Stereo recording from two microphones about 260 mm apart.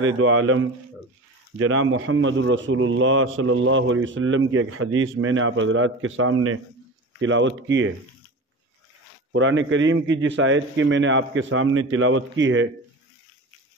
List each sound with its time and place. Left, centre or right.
0.0 s a man's voice: right
9.3 s a man's voice: right